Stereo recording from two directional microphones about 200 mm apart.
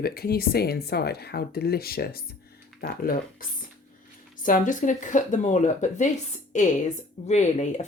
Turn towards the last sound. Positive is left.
turn(degrees=35)  # may be behind; listen again after turning